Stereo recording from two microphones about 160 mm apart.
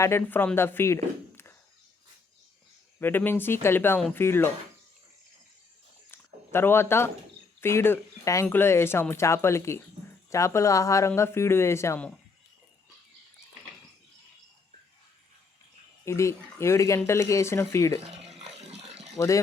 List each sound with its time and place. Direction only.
0.0 s speech: 15° left (ahead or behind)
3.0 s speech: 10° left (ahead or behind)
6.1 s a sound: 15° left (ahead or behind)
7.6 s speech: 15° left (ahead or behind)
16.0 s speech: 20° left (ahead or behind)
18.3 s a sound: 40° right (ahead or behind)
19.1 s speech: 20° left (ahead or behind)